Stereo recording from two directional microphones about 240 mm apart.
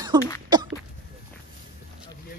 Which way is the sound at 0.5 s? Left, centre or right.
Centre.